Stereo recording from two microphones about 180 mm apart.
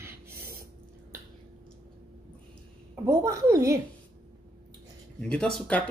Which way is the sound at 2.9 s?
15° right (ahead or behind).